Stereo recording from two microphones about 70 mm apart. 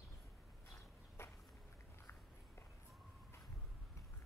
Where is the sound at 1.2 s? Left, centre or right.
Left.